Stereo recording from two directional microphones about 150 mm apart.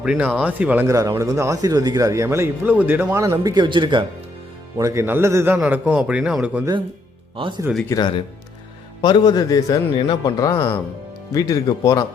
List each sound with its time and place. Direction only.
0.0 s speech: 5° right (ahead or behind); by 4.0 s 30° right (ahead or behind)
4.8 s speech: 20° right (ahead or behind)
7.3 s speech: 35° right (ahead or behind)
7.9 s a man's voice: 30° left (ahead or behind)
11.3 s a man's voice: 25° left (ahead or behind)